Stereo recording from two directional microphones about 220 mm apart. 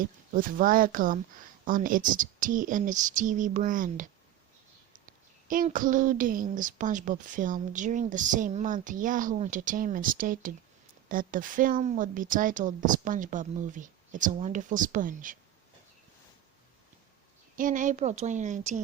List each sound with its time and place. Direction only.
0.0 s speech: 40° right (ahead or behind)
17.6 s speech: 35° right (ahead or behind)